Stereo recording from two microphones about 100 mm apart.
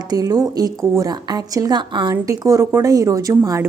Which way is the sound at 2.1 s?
35° right (ahead or behind).